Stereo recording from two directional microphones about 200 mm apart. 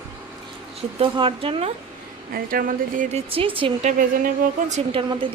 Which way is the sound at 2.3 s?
45° right (ahead or behind).